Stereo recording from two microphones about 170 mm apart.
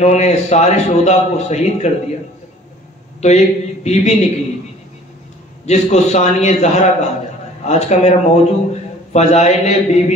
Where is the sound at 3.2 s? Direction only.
40° left (ahead or behind).